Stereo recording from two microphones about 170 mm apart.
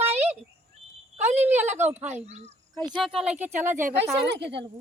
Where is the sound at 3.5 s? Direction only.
15° right (ahead or behind).